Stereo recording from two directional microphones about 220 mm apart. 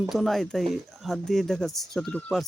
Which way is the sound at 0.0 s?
Centre (ahead or behind).